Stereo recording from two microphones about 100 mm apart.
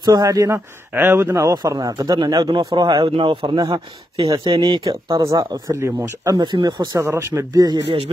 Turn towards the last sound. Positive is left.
turn(degrees=-40)  # may be behind; listen again after turning